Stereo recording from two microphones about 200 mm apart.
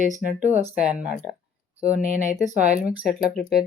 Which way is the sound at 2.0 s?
35° right (ahead or behind).